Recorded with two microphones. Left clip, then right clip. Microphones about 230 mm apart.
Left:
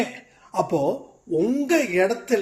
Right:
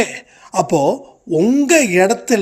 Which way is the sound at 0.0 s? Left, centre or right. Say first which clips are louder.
Right 9 dB; right.